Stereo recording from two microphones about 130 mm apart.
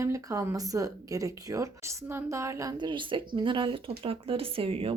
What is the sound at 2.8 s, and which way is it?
Speech, 40° right (ahead or behind).